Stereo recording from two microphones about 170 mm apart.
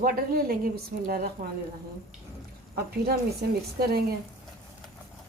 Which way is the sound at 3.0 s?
65° right (ahead or behind).